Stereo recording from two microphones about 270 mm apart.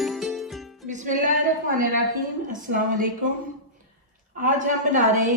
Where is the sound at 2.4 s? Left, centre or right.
Right.